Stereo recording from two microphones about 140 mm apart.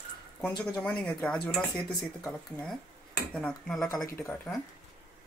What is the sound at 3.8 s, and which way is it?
Speech, 25° left (ahead or behind).